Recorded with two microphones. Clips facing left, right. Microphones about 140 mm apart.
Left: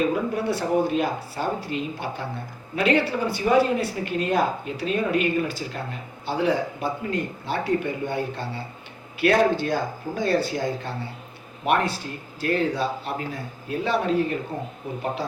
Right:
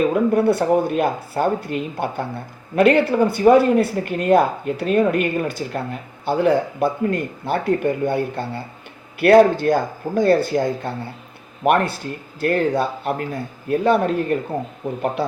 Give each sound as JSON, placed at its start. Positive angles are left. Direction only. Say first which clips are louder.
{"t": 0.1, "sound": "speech", "louder": "right 8 dB", "side_deg": -55}